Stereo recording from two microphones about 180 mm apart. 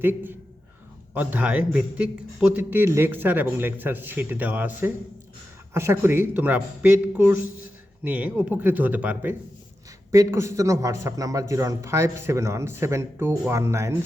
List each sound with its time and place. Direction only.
0.0 s a man's voice: 10° right (ahead or behind)